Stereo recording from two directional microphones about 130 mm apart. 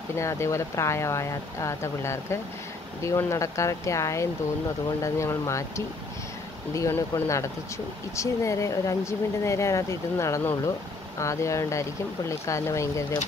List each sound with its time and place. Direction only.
0.2 s speech: 20° left (ahead or behind)